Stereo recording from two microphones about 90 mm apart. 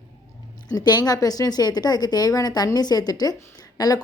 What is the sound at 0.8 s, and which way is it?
A woman's voice, 50° left (ahead or behind).